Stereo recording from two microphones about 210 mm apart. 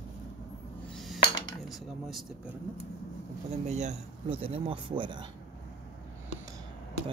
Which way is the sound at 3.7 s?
35° right (ahead or behind).